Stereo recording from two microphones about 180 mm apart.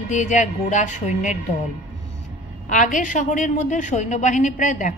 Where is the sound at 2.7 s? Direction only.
45° left (ahead or behind).